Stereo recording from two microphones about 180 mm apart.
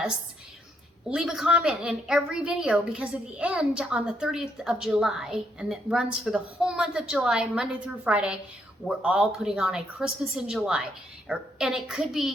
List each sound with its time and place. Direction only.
1.0 s a woman's voice: 5° right (ahead or behind)